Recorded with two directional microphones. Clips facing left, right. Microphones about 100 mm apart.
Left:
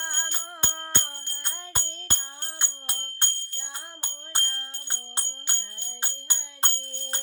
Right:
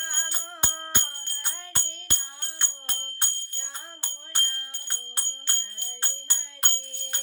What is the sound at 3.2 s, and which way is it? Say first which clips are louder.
Music: left 2 dB; 5° right (ahead or behind).